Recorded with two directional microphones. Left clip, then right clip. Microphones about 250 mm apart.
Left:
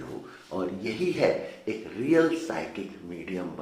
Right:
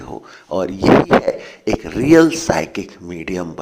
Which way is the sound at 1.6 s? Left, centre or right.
Right.